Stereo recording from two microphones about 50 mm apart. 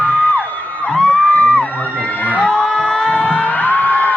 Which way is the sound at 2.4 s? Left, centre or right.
Centre.